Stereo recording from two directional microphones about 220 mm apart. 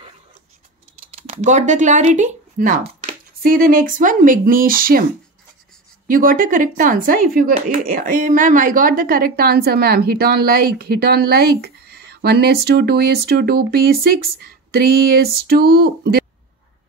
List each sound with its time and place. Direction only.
1.1 s speech: 35° right (ahead or behind)
6.0 s speech: 40° right (ahead or behind)